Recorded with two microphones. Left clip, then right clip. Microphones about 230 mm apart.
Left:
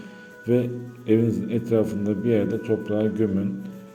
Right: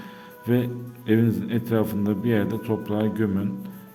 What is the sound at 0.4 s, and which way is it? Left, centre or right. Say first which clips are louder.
A man's voice: left 2 dB; right.